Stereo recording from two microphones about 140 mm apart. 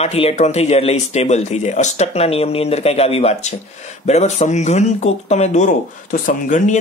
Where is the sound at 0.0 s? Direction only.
45° left (ahead or behind).